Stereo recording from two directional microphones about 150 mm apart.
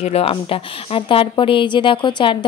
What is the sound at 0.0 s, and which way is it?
A woman's voice, 40° left (ahead or behind).